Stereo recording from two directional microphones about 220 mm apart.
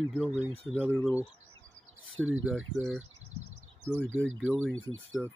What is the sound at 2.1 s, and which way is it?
Speech, 65° right (ahead or behind).